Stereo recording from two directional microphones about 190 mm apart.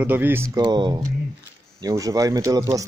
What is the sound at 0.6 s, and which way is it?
Speech, 20° right (ahead or behind).